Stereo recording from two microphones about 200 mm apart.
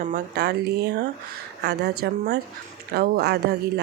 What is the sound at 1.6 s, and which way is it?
A woman's voice, 60° right (ahead or behind).